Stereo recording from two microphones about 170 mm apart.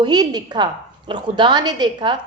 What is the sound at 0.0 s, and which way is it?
A woman's voice, 25° right (ahead or behind).